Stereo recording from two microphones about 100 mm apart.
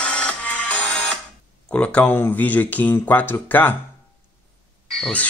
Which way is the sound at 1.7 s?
15° left (ahead or behind).